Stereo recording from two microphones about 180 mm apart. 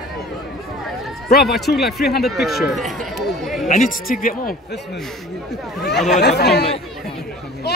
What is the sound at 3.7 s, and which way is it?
Speech, 50° left (ahead or behind).